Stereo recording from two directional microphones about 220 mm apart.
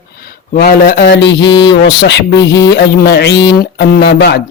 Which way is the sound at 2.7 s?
45° left (ahead or behind).